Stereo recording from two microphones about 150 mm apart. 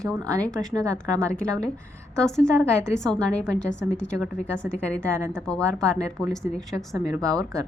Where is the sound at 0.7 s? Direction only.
20° right (ahead or behind).